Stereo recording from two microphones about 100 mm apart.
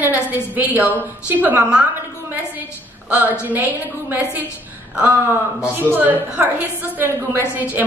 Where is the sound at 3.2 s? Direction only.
15° right (ahead or behind).